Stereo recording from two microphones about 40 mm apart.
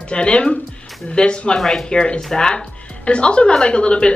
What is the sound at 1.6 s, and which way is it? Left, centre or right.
Speech, centre.